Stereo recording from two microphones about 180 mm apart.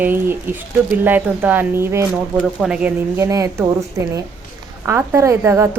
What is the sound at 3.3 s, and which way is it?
Speech, 20° right (ahead or behind).